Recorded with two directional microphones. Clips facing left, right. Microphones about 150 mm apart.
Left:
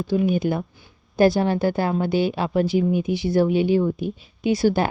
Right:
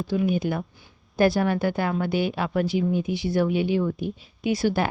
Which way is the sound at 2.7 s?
45° left (ahead or behind).